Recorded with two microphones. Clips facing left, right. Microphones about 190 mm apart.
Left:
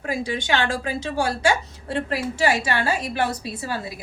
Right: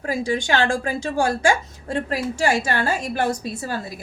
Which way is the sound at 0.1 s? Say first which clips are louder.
Right 2 dB; 45° right (ahead or behind).